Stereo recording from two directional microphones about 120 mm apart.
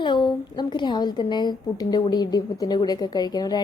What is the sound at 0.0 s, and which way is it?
A woman's voice, 40° left (ahead or behind).